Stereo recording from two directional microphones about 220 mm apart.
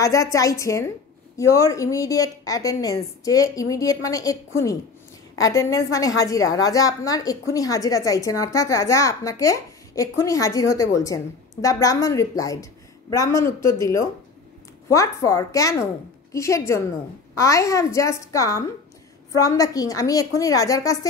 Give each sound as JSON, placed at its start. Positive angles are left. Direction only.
{"t": 0.0, "sound": "a woman's voice", "side_deg": 15}
{"t": 5.4, "sound": "a woman's voice", "side_deg": 15}